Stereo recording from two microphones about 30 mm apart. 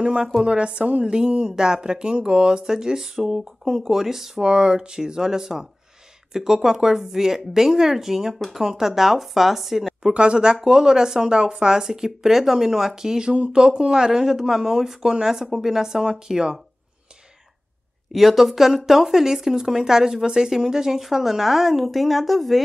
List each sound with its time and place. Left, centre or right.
0.0 s a woman's voice: right
1.0 s speech: right
2.6 s a woman's voice: centre
4.4 s a woman's voice: right; by 10.1 s centre
10.1 s speech: right
13.3 s a woman's voice: right
18.1 s a woman's voice: centre